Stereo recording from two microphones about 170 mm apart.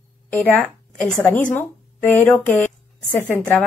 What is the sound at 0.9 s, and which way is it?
Speech, 45° left (ahead or behind).